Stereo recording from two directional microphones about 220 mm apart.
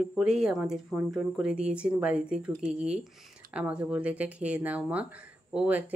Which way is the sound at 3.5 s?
5° right (ahead or behind).